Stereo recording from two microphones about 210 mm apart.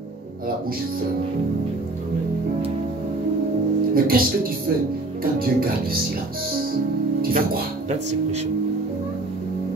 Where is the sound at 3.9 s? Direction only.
45° right (ahead or behind).